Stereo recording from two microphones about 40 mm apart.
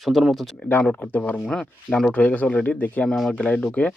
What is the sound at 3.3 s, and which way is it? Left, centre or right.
Speech, left.